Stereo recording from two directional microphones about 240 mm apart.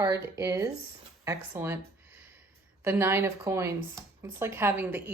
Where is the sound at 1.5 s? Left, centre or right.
Centre.